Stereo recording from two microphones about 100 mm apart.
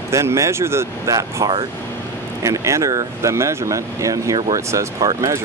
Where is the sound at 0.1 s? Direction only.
30° right (ahead or behind).